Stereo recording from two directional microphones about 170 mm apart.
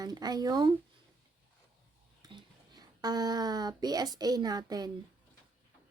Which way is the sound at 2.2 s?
25° right (ahead or behind).